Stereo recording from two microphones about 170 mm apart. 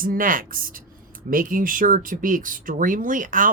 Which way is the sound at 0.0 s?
55° right (ahead or behind).